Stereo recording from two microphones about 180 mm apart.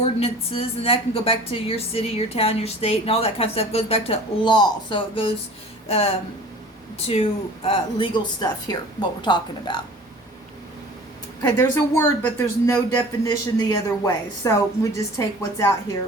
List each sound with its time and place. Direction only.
0.0 s a woman's voice: 35° left (ahead or behind)
11.4 s speech: 15° left (ahead or behind)